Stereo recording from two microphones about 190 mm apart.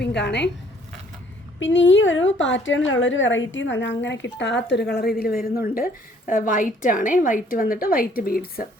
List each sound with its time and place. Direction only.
0.0 s a woman's voice: 65° left (ahead or behind)
1.5 s a woman's voice: 80° left; by 8.6 s 50° left (ahead or behind)